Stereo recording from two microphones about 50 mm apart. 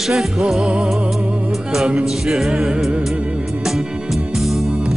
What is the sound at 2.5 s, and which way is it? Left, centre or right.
Music, centre.